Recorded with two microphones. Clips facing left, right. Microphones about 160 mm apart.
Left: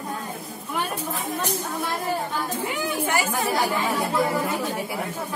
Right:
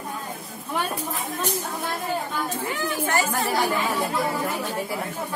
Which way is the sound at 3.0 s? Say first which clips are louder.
Right 1 dB; 10° left (ahead or behind).